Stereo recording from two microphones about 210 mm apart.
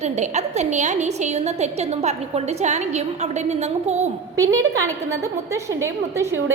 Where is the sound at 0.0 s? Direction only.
30° right (ahead or behind).